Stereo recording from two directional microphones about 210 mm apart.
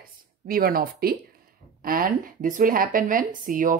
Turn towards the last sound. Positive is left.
turn(degrees=-40)  # may be behind; listen again after turning